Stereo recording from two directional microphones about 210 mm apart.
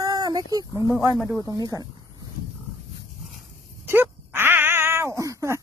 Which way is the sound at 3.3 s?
Centre (ahead or behind).